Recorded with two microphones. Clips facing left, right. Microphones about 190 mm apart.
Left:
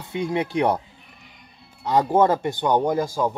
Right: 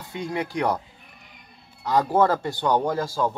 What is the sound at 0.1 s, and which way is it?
Speech, 25° left (ahead or behind).